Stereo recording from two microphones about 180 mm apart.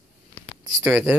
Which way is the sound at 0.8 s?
10° right (ahead or behind).